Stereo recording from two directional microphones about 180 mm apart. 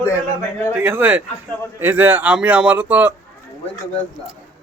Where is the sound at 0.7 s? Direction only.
10° right (ahead or behind).